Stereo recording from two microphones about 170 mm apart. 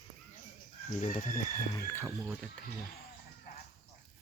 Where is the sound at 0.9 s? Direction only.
45° left (ahead or behind).